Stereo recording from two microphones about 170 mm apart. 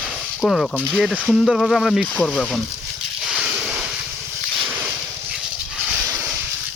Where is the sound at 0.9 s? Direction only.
5° left (ahead or behind).